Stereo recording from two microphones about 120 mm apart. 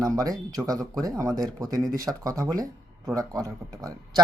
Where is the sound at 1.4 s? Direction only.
30° right (ahead or behind).